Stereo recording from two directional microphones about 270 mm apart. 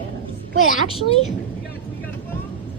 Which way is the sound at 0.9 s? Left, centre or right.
Left.